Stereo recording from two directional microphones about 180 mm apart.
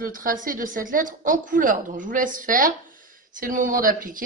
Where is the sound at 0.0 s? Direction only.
50° right (ahead or behind).